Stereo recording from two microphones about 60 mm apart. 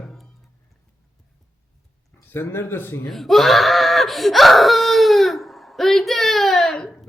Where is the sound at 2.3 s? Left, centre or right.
Left.